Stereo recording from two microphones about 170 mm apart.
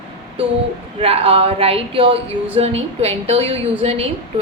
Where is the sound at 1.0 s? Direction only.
35° right (ahead or behind).